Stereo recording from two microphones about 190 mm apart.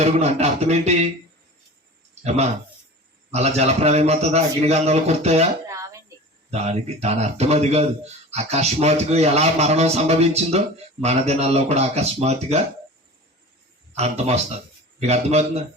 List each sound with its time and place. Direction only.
0.0 s a man's voice: 35° right (ahead or behind)
2.2 s a man's voice: 35° right (ahead or behind)
5.6 s a sound: 15° right (ahead or behind)
6.5 s a man's voice: 35° right (ahead or behind)
13.9 s a man's voice: 35° right (ahead or behind)